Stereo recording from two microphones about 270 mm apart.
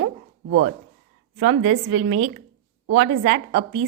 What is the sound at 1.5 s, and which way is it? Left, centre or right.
A woman's voice, right.